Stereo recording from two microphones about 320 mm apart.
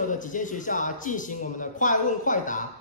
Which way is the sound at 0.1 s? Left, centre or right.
Left.